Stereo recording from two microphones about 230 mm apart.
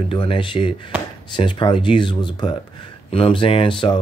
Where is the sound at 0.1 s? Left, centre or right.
Left.